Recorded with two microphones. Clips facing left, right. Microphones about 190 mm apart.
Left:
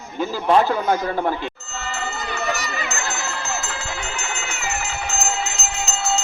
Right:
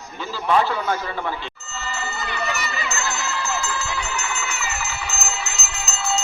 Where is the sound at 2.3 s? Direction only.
40° left (ahead or behind).